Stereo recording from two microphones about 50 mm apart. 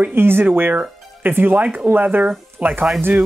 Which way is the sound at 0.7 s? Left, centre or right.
Right.